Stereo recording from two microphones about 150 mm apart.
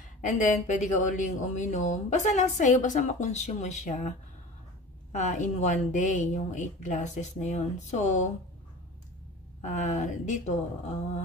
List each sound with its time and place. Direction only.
0.2 s speech: 55° left (ahead or behind)
5.1 s speech: 50° left (ahead or behind)
9.6 s speech: 55° left (ahead or behind)